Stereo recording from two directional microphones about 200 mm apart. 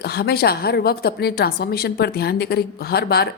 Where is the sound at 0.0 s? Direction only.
50° left (ahead or behind).